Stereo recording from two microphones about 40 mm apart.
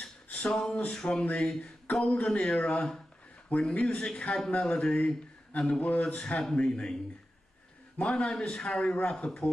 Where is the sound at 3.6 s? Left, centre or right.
Left.